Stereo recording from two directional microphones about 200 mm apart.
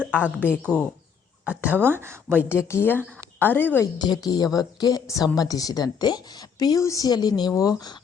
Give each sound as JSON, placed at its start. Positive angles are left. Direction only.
{"t": 0.0, "sound": "a sound", "side_deg": 10}
{"t": 0.3, "sound": "speech", "side_deg": 10}
{"t": 1.8, "sound": "a woman's voice", "side_deg": -10}
{"t": 2.5, "sound": "speech", "side_deg": 15}
{"t": 3.9, "sound": "a woman's voice", "side_deg": 20}